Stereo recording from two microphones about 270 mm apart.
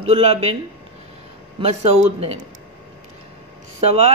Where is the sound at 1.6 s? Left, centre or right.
Right.